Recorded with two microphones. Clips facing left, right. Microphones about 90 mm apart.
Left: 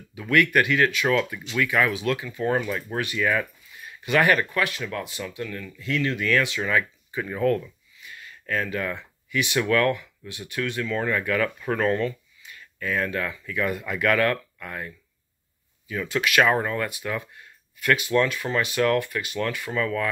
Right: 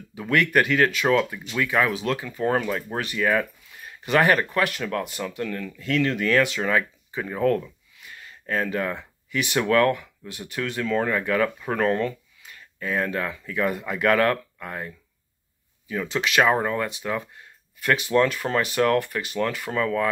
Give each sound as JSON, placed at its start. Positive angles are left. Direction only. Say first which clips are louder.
{"t": 0.1, "sound": "speech", "louder": "even", "side_deg": -35}
{"t": 4.6, "sound": "speech", "louder": "right 3 dB", "side_deg": -50}
{"t": 11.6, "sound": "speech", "louder": "right 1 dB", "side_deg": -15}
{"t": 12.4, "sound": "speech", "louder": "even", "side_deg": -30}